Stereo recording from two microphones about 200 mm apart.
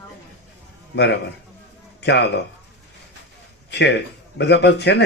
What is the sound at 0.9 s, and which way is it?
Speech, 60° left (ahead or behind).